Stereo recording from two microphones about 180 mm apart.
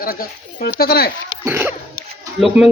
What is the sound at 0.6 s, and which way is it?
Speech, 60° left (ahead or behind).